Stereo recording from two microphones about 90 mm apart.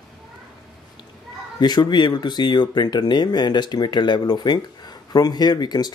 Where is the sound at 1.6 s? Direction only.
50° left (ahead or behind).